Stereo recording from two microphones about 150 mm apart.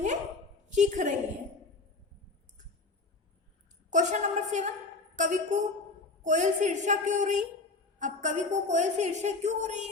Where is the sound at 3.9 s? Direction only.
55° right (ahead or behind).